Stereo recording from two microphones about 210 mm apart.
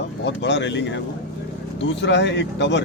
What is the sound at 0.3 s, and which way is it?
A man's voice, 55° left (ahead or behind).